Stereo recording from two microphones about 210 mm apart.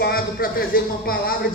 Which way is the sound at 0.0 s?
45° left (ahead or behind).